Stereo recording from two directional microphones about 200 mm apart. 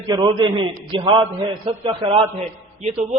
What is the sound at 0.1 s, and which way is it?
A man's voice, 25° right (ahead or behind).